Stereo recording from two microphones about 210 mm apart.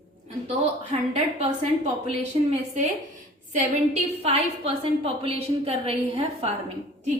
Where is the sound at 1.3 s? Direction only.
30° right (ahead or behind).